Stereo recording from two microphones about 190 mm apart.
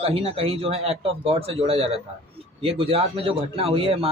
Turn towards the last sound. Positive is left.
turn(degrees=-30)  # may be behind; listen again after turning